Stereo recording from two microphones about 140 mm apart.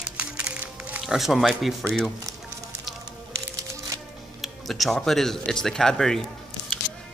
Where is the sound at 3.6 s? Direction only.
25° right (ahead or behind).